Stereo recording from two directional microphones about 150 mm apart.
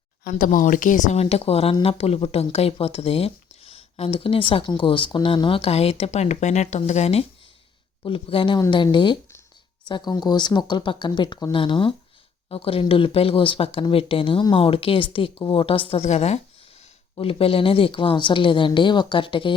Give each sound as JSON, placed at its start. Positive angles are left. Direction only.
{"t": 0.3, "sound": "speech", "side_deg": 60}